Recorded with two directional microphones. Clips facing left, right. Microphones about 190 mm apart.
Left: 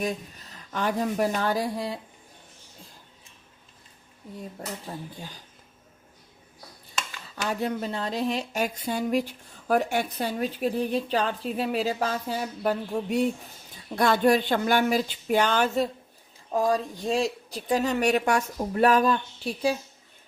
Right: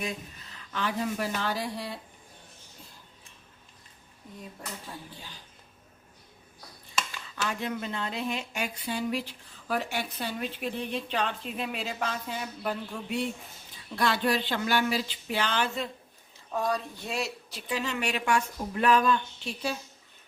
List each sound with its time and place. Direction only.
0.7 s speech: 45° left (ahead or behind)
4.9 s speech: 35° left (ahead or behind)
7.4 s speech: 40° left (ahead or behind)